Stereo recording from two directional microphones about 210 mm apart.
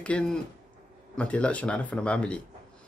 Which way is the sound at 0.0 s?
5° left (ahead or behind).